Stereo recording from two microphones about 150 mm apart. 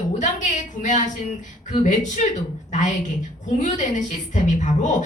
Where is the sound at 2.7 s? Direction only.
55° left (ahead or behind).